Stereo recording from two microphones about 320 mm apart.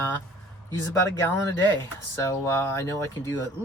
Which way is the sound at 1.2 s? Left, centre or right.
Centre.